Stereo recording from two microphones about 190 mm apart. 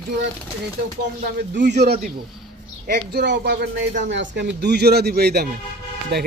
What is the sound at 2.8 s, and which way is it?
Speech, 50° right (ahead or behind).